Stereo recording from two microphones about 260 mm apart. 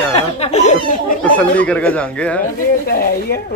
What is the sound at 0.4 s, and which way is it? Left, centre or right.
Speech, left.